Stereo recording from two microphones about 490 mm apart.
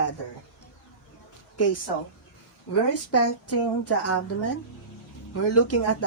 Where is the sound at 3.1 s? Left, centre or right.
Left.